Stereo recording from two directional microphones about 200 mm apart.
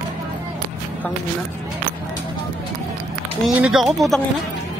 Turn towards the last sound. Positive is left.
turn(degrees=0)  # may be behind; listen again after turning